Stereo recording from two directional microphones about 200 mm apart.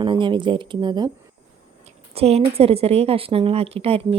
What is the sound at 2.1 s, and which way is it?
Speech, 30° right (ahead or behind).